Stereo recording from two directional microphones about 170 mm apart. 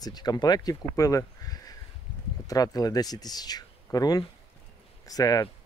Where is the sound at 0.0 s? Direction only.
25° left (ahead or behind).